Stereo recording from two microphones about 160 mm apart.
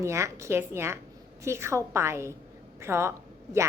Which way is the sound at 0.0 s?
20° right (ahead or behind).